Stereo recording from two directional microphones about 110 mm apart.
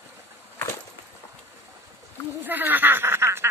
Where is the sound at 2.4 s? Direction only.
15° right (ahead or behind).